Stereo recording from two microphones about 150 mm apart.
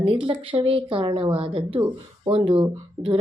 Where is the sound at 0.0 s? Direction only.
35° right (ahead or behind).